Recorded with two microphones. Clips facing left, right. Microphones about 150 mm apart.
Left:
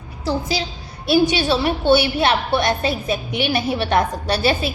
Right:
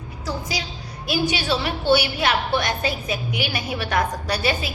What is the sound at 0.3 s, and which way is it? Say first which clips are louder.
A woman's voice: left 7 dB; 30° left (ahead or behind).